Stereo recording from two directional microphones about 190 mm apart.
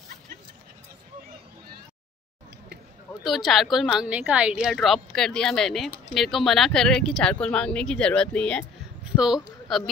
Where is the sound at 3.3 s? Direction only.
Centre (ahead or behind).